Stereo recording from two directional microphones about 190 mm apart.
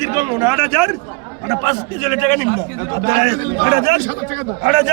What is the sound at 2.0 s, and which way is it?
A man's voice, 65° right (ahead or behind).